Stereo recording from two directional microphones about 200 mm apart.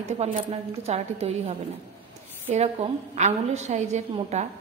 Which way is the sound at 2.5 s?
30° right (ahead or behind).